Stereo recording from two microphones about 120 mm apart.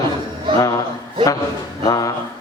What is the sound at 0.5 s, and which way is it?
Music, 30° left (ahead or behind).